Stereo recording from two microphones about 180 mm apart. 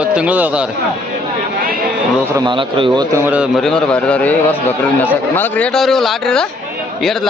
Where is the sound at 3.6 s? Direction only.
5° left (ahead or behind).